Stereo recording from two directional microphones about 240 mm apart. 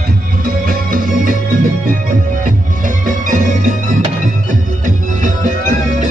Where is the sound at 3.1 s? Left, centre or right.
Right.